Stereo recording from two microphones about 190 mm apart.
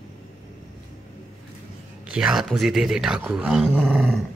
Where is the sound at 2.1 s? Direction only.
5° right (ahead or behind).